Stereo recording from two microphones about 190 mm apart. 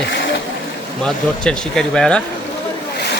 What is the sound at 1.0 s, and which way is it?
Speech, 5° left (ahead or behind).